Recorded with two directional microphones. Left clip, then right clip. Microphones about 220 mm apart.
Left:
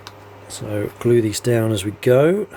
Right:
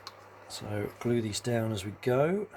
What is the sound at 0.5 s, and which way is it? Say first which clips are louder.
Speech: left 11 dB; 25° left (ahead or behind).